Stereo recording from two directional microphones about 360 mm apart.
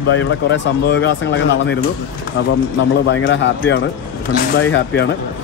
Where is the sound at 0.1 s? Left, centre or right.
Left.